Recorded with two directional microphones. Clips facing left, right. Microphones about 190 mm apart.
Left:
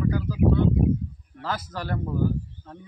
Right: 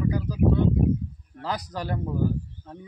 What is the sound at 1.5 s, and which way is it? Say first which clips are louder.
Speech: even; 15° right (ahead or behind).